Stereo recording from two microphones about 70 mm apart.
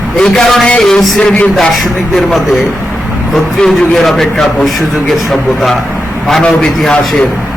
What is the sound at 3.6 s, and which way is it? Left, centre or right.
Speech, centre.